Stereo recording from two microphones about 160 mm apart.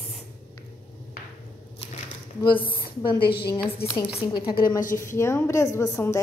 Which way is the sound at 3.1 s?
80° left.